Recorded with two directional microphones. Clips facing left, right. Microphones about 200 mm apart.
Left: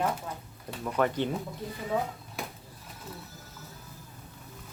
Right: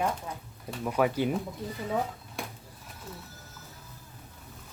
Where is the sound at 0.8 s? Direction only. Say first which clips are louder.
Right 1 dB; 10° right (ahead or behind).